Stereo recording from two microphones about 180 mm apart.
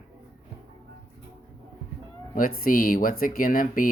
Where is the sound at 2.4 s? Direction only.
50° left (ahead or behind).